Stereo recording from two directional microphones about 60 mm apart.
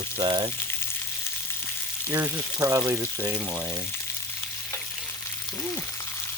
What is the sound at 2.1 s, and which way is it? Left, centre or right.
Speech, right.